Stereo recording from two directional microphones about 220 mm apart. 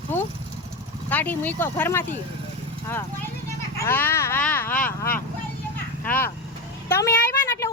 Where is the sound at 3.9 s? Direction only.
10° left (ahead or behind).